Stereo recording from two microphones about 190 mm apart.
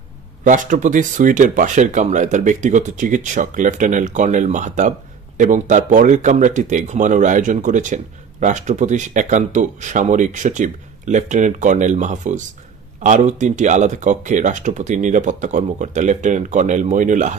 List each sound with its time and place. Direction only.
0.4 s speech: 40° right (ahead or behind)